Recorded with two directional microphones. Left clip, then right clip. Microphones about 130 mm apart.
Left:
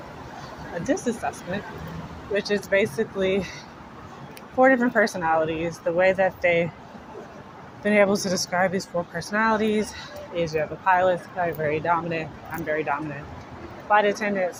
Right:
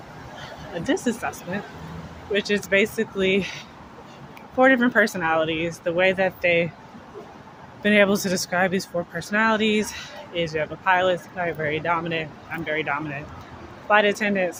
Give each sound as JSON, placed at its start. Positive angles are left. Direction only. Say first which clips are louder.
{"t": 0.9, "sound": "speech", "louder": "right 1 dB", "side_deg": -40}
{"t": 7.8, "sound": "speech", "louder": "right 1 dB", "side_deg": -40}
{"t": 9.1, "sound": "speech", "louder": "right 2 dB", "side_deg": -35}
{"t": 13.8, "sound": "speech", "louder": "right 1 dB", "side_deg": -65}